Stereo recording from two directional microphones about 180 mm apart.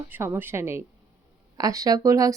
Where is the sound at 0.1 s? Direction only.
10° right (ahead or behind).